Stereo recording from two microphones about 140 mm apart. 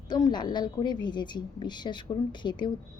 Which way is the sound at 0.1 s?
30° left (ahead or behind).